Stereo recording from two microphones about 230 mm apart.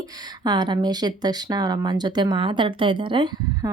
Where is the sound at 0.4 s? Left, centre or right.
Centre.